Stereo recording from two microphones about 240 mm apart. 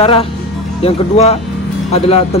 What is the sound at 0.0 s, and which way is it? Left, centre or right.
Speech, left.